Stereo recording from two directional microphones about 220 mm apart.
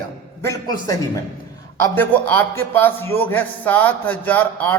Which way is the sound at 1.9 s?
10° left (ahead or behind).